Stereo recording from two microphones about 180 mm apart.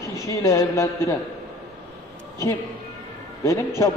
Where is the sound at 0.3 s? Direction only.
15° left (ahead or behind).